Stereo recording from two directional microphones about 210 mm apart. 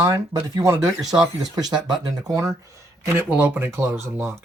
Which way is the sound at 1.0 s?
Centre (ahead or behind).